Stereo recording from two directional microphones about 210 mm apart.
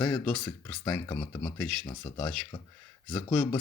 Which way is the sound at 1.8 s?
20° left (ahead or behind).